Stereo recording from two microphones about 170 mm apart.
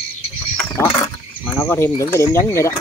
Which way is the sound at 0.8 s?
15° left (ahead or behind).